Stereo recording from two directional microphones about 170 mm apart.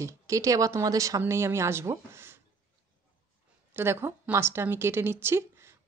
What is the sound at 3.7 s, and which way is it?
Speech, 15° right (ahead or behind).